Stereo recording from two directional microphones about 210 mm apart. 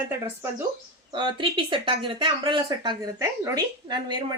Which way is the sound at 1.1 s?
20° right (ahead or behind).